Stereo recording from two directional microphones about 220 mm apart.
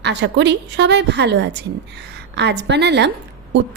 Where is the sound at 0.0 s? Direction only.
50° right (ahead or behind).